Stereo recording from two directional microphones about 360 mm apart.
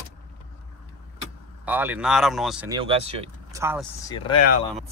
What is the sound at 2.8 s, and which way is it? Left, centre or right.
Speech, centre.